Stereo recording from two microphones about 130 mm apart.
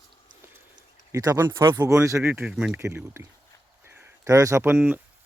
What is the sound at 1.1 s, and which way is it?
Speech, 25° right (ahead or behind).